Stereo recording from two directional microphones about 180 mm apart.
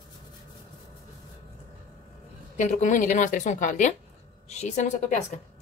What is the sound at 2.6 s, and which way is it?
A woman's voice, 40° left (ahead or behind).